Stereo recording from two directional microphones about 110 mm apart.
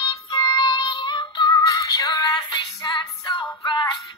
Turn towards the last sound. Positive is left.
turn(degrees=40)  # may be behind; listen again after turning